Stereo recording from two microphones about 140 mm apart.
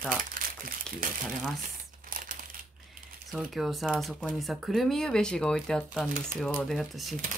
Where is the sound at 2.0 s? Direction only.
80° right.